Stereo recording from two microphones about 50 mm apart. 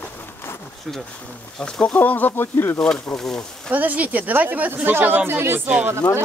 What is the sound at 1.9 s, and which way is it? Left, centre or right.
Speech, left.